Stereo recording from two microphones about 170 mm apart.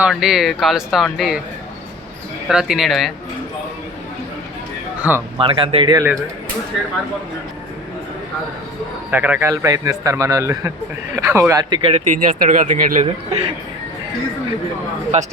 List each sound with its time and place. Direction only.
0.0 s speech: centre (ahead or behind)
2.5 s speech: 5° right (ahead or behind)
5.1 s speech: 10° right (ahead or behind)
5.4 s a man's voice: 30° right (ahead or behind)
9.0 s a man's voice: 10° right (ahead or behind)
11.8 s speech: 35° right (ahead or behind)
12.5 s speech: 50° right (ahead or behind)
15.1 s speech: 45° right (ahead or behind)